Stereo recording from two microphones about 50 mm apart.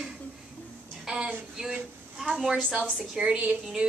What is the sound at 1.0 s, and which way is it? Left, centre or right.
A woman's voice, centre.